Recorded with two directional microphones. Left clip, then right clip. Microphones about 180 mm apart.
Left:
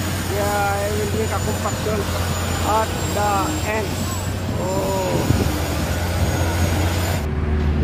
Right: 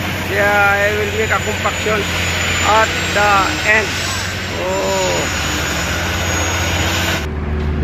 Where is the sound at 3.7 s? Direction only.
10° left (ahead or behind).